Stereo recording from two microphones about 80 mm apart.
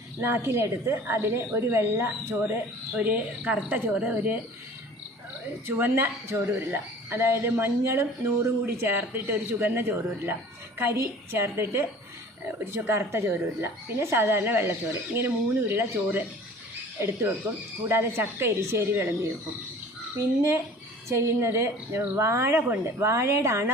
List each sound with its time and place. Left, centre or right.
0.2 s a woman's voice: right
5.6 s a woman's voice: right
12.9 s a woman's voice: right